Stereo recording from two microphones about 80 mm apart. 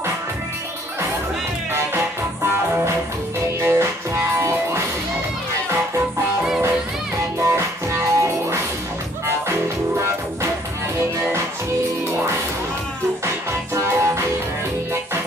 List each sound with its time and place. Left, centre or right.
3.6 s music: right
7.3 s music: right
13.7 s music: right